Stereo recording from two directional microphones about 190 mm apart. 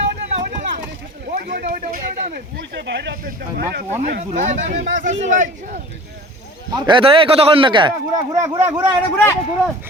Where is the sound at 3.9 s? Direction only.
40° right (ahead or behind).